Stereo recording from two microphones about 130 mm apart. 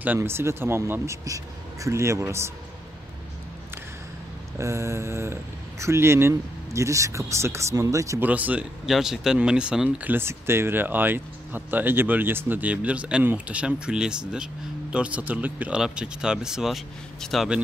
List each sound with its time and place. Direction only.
0.0 s speech: 15° right (ahead or behind)
4.6 s speech: 20° right (ahead or behind)
8.3 s speech: 10° right (ahead or behind)